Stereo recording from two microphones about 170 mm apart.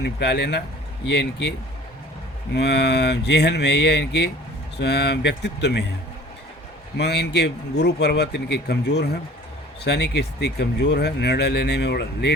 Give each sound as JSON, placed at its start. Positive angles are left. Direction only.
{"t": 0.0, "sound": "speech", "side_deg": 80}
{"t": 6.9, "sound": "speech", "side_deg": 80}